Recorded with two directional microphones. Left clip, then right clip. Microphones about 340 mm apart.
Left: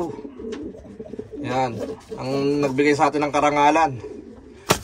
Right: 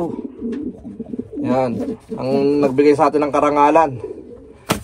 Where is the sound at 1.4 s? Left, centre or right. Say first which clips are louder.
Right 5 dB; centre.